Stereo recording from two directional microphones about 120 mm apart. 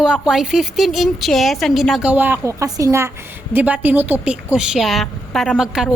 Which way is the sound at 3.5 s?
15° right (ahead or behind).